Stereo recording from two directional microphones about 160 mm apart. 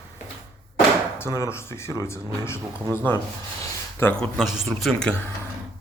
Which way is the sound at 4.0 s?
10° left (ahead or behind).